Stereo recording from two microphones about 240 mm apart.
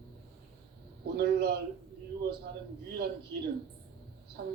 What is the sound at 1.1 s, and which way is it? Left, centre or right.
Speech, right.